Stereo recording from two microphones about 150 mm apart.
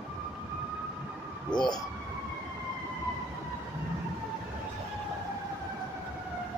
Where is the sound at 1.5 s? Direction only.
25° left (ahead or behind).